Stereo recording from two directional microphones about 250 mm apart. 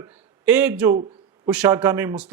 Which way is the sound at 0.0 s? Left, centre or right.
Centre.